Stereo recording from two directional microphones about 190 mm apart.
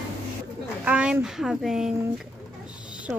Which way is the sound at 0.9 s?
5° right (ahead or behind).